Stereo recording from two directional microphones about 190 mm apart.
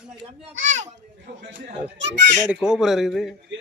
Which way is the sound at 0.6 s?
40° right (ahead or behind).